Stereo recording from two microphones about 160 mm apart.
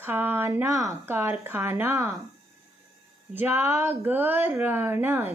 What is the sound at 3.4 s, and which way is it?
Speech, 15° right (ahead or behind).